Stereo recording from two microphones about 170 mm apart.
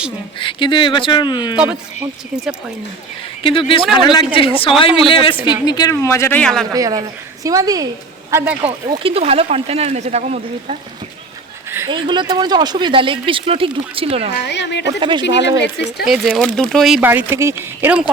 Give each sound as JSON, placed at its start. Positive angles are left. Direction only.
{"t": 0.3, "sound": "speech", "side_deg": 30}
{"t": 1.5, "sound": "speech", "side_deg": -10}
{"t": 3.4, "sound": "a man's voice", "side_deg": 30}
{"t": 6.7, "sound": "speech", "side_deg": -20}
{"t": 8.9, "sound": "speech", "side_deg": -35}
{"t": 11.9, "sound": "speech", "side_deg": -30}
{"t": 14.3, "sound": "a woman's voice", "side_deg": 80}
{"t": 14.8, "sound": "speech", "side_deg": -25}
{"t": 16.0, "sound": "speech", "side_deg": 0}